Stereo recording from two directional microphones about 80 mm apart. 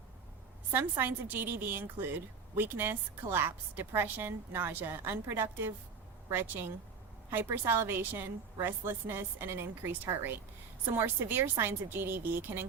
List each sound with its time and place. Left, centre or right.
0.7 s a woman's voice: right